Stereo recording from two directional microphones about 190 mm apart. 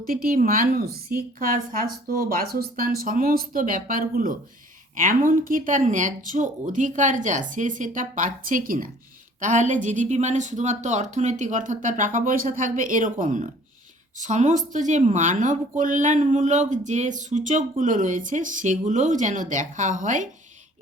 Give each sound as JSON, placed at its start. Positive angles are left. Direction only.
{"t": 0.1, "sound": "a woman's voice", "side_deg": -50}